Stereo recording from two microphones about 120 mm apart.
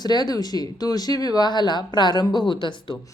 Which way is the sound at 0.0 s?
35° left (ahead or behind).